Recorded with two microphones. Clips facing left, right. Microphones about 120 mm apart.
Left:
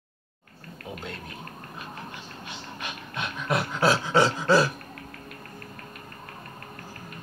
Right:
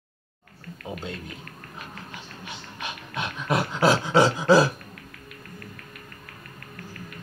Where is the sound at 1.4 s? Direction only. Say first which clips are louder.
Left 2 dB; 30° left (ahead or behind).